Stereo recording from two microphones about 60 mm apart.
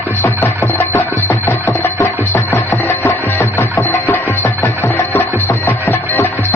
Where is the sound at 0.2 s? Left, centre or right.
Left.